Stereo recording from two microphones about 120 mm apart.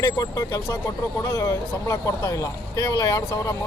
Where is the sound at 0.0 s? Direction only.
30° left (ahead or behind).